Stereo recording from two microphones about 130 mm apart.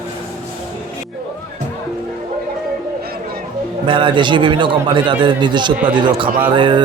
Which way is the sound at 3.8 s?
40° right (ahead or behind).